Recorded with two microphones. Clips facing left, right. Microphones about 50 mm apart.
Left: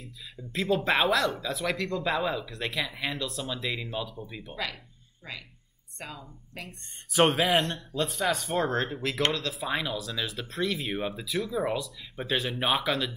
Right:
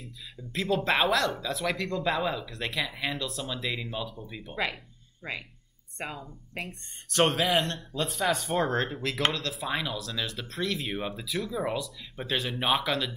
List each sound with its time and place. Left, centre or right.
0.0 s speech: centre
5.2 s speech: right
7.1 s speech: centre